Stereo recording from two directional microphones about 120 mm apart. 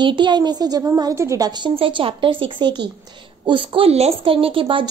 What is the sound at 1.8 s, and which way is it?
A woman's voice, 50° right (ahead or behind).